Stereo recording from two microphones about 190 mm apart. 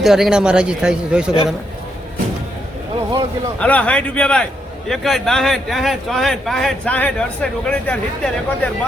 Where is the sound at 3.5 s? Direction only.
5° left (ahead or behind).